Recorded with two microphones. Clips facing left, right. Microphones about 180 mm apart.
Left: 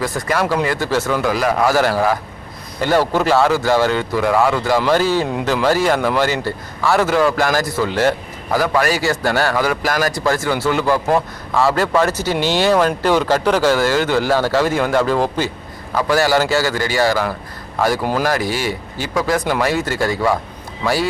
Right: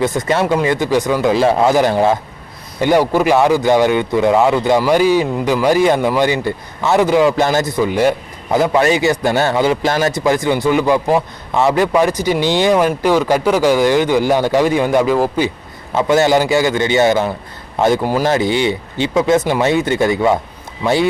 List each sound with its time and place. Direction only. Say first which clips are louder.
0.0 s speech: right 4 dB; 20° right (ahead or behind); by 15.4 s 5° right (ahead or behind)
16.0 s speech: right 3 dB; 20° right (ahead or behind)